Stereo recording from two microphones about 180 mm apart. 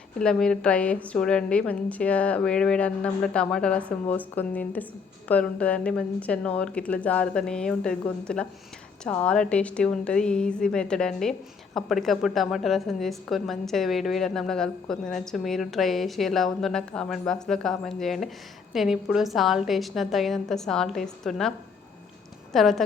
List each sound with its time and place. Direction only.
0.2 s a woman's voice: 5° left (ahead or behind)
22.5 s a woman's voice: centre (ahead or behind)